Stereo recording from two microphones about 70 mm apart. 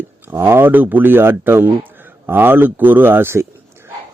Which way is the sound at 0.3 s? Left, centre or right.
Right.